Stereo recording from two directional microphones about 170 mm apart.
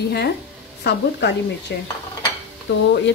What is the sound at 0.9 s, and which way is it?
Speech, 85° left.